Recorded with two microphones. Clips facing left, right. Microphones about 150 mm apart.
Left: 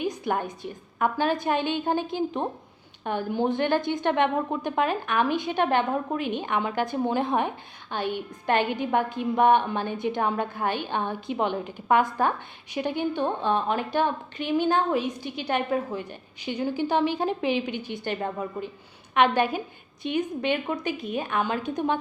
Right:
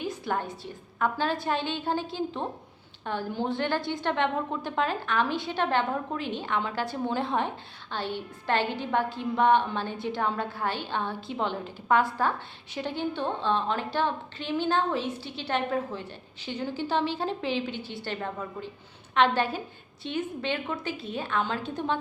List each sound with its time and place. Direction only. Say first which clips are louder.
0.0 s a woman's voice: left 3 dB; 15° left (ahead or behind)